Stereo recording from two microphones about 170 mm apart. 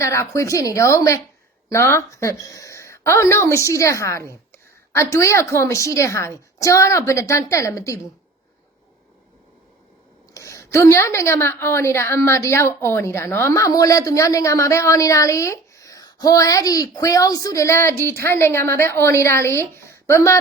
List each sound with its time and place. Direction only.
0.0 s a woman's voice: 15° left (ahead or behind)
10.3 s a woman's voice: 15° left (ahead or behind)